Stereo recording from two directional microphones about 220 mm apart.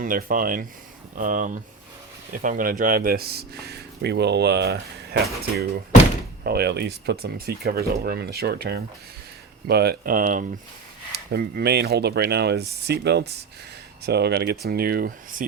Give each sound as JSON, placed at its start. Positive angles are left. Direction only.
{"t": 0.0, "sound": "speech", "side_deg": -40}
{"t": 6.4, "sound": "speech", "side_deg": -45}